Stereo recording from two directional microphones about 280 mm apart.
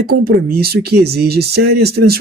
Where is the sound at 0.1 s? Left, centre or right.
Right.